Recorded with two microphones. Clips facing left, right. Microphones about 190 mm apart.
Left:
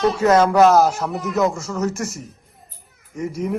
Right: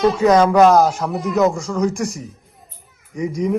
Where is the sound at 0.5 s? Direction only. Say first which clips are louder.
Right 1 dB; 5° left (ahead or behind).